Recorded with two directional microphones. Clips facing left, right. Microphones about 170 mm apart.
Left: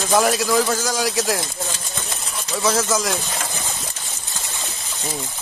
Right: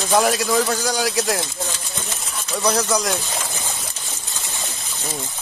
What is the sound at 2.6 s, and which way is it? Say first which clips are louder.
Speech: even; centre (ahead or behind).